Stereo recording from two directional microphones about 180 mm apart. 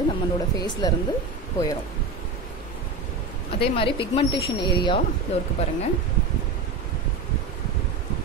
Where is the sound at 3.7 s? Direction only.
30° left (ahead or behind).